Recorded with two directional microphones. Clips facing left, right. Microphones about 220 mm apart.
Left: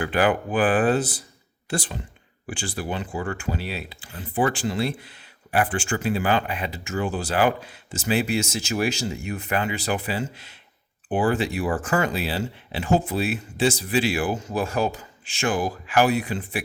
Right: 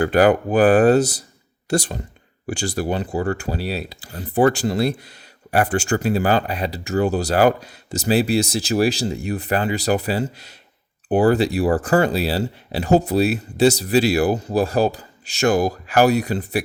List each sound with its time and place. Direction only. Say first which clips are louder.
0.0 s speech: right 7 dB; 40° right (ahead or behind)